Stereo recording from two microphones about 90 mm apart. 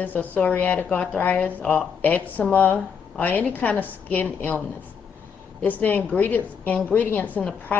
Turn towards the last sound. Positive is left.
turn(degrees=10)  # may be behind; listen again after turning